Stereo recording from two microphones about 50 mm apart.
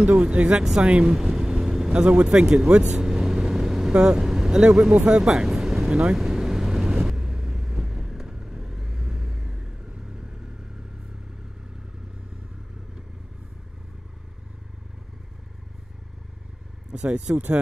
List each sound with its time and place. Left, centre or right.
0.0 s speech: right
1.1 s vehicle: centre
1.9 s speech: centre
2.9 s vehicle: centre
4.6 s speech: right
5.4 s vehicle: centre
16.9 s speech: right